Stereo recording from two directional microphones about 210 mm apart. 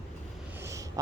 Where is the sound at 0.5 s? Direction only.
15° right (ahead or behind).